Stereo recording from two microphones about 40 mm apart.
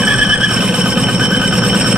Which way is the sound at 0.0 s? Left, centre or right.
Right.